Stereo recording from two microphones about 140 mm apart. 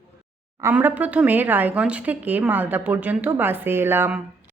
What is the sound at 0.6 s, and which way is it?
Speech, 15° right (ahead or behind).